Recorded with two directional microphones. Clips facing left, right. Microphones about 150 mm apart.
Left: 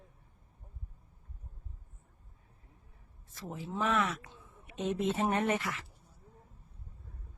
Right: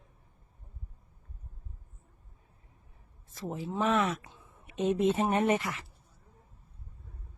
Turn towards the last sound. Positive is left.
turn(degrees=-20)  # may be behind; listen again after turning